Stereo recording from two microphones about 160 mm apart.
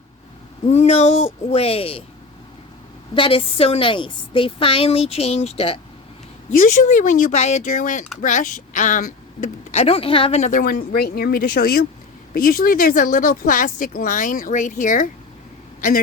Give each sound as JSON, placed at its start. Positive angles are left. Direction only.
{"t": 0.7, "sound": "a woman's voice", "side_deg": 40}
{"t": 3.2, "sound": "a woman's voice", "side_deg": 35}
{"t": 6.8, "sound": "speech", "side_deg": 50}
{"t": 10.6, "sound": "speech", "side_deg": 70}